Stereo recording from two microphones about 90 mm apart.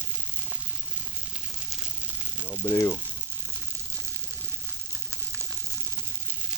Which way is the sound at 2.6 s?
35° left (ahead or behind).